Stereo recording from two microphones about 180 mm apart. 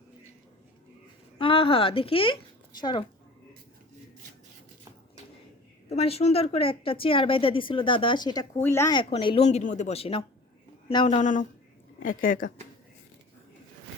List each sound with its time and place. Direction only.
1.4 s speech: 30° left (ahead or behind)
5.9 s a woman's voice: 35° left (ahead or behind); by 8.9 s 15° left (ahead or behind)
8.9 s speech: 30° left (ahead or behind); by 12.5 s 50° left (ahead or behind)